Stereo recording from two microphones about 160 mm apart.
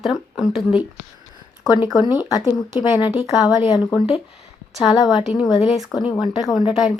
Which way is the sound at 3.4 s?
25° left (ahead or behind).